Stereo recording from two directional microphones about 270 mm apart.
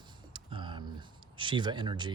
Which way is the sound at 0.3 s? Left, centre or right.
Centre.